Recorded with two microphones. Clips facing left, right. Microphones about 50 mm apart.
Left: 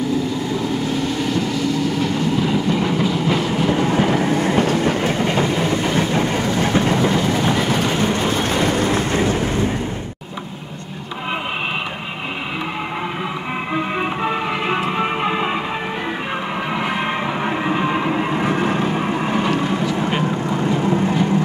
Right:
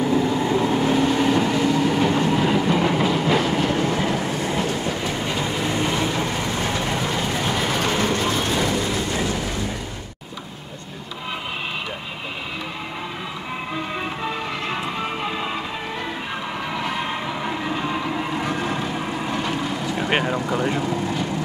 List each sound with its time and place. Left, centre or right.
0.1 s vehicle: right; by 3.4 s centre
3.9 s train: left
7.3 s vehicle: centre
8.1 s vehicle: left
13.7 s music: left
16.7 s music: left
19.8 s vehicle: left
20.1 s vehicle: right
20.3 s vehicle: left